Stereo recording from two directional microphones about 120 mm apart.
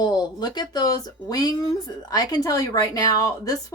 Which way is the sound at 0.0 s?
35° left (ahead or behind).